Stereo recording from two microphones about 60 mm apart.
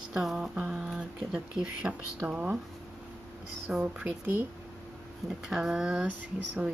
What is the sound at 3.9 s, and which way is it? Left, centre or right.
Speech, right.